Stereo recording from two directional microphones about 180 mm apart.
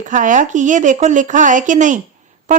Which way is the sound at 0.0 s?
45° right (ahead or behind).